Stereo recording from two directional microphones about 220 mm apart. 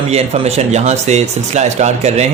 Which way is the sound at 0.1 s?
30° right (ahead or behind).